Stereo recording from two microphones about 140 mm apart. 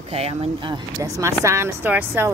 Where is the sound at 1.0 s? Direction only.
20° right (ahead or behind).